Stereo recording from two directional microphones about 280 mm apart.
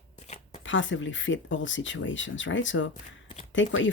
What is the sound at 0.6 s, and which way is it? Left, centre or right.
Speech, left.